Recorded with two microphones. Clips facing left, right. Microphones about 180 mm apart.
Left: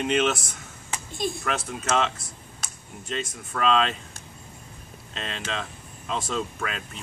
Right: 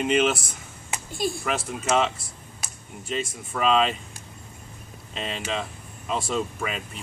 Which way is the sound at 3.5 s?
5° right (ahead or behind).